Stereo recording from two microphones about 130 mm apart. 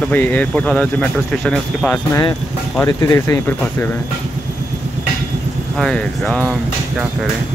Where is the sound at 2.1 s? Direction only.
25° left (ahead or behind).